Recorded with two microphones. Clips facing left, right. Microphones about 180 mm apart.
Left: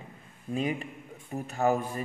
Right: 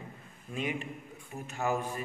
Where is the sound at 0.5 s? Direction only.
35° left (ahead or behind).